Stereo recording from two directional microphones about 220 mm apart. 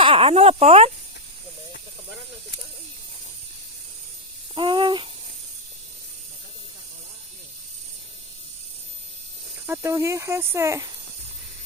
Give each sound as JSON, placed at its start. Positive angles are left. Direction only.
{"t": 0.0, "sound": "a sound", "side_deg": -25}
{"t": 4.5, "sound": "babbling", "side_deg": -20}
{"t": 9.6, "sound": "speech", "side_deg": -10}